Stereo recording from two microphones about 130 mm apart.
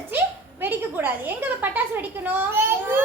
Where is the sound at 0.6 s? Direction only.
15° right (ahead or behind).